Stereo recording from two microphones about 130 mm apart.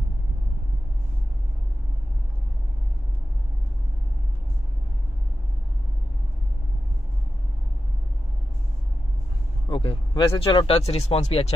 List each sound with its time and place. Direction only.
9.7 s vehicle: 40° left (ahead or behind)
10.4 s speech: 40° left (ahead or behind)